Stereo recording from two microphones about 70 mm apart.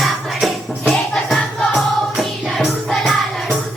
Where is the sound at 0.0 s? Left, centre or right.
Centre.